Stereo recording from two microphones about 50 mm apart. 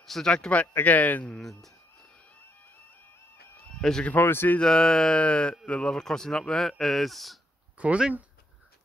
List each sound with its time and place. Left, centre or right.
0.0 s speech: centre
0.7 s a man's voice: left
3.8 s speech: centre
4.2 s speech: left
4.6 s speech: centre
7.7 s a sound: right